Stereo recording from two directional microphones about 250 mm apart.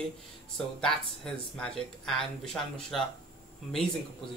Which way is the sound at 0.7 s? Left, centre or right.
Centre.